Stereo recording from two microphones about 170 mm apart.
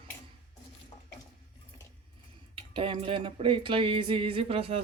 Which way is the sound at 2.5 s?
30° right (ahead or behind).